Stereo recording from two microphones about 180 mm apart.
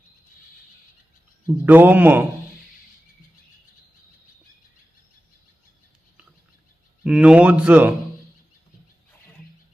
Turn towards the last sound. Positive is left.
turn(degrees=-10)  # may be behind; listen again after turning